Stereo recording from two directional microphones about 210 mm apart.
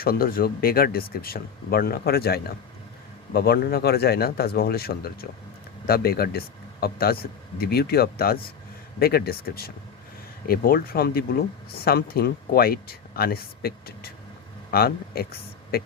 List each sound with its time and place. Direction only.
0.0 s speech: 45° left (ahead or behind)